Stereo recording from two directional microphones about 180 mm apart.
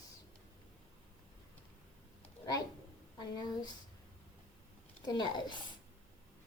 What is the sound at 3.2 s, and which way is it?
Speech, 25° left (ahead or behind).